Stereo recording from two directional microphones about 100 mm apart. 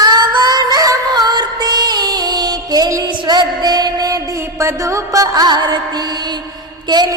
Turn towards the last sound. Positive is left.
turn(degrees=-45)  # may be behind; listen again after turning